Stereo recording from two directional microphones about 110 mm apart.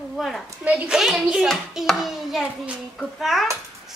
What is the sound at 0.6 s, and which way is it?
A child's voice, 10° right (ahead or behind).